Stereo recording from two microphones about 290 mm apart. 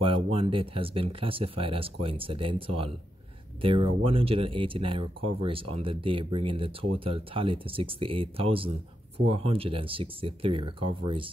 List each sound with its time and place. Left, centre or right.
0.0 s speech: centre